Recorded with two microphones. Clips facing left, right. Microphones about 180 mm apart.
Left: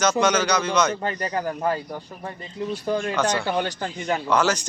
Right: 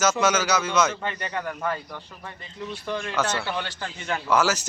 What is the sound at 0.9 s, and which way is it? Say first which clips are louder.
A man's voice: left 4 dB; 35° left (ahead or behind).